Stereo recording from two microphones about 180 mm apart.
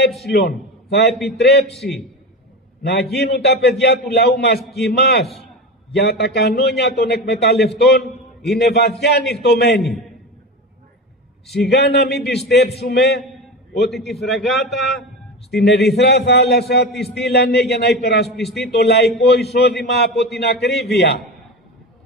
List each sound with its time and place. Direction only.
0.3 s a man's voice: 65° left (ahead or behind)
1.1 s a man's voice: centre (ahead or behind)
1.4 s a man's voice: 65° left (ahead or behind)
1.7 s a man's voice: centre (ahead or behind)
2.8 s a man's voice: 65° left (ahead or behind)
5.2 s a man's voice: centre (ahead or behind)
5.9 s a man's voice: 65° left (ahead or behind)
11.5 s a man's voice: 65° left (ahead or behind)
13.8 s a man's voice: centre (ahead or behind)
15.5 s a man's voice: 65° left (ahead or behind)
18.3 s a man's voice: centre (ahead or behind)
18.6 s a man's voice: 65° left (ahead or behind)